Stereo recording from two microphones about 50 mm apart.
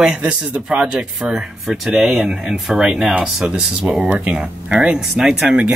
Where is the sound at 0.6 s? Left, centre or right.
Centre.